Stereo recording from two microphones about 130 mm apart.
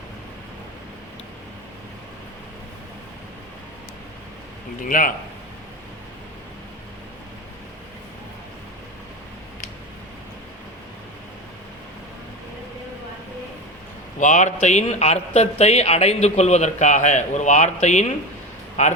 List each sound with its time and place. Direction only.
4.8 s speech: 90° left
14.2 s speech: 70° left (ahead or behind)